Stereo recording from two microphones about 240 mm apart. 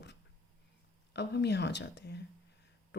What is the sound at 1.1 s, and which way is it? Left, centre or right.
Speech, left.